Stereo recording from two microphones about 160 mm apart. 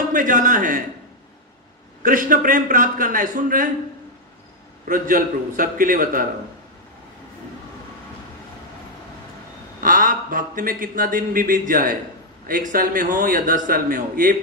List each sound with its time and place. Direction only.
0.1 s a man's voice: 55° right (ahead or behind)
2.0 s speech: 60° right (ahead or behind)
4.8 s speech: 60° right (ahead or behind)
9.8 s speech: 60° right (ahead or behind)